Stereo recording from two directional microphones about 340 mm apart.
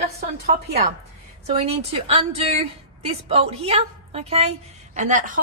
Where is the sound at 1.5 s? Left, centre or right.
Centre.